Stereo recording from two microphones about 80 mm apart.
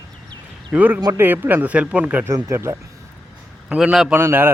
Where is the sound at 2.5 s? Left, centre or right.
Right.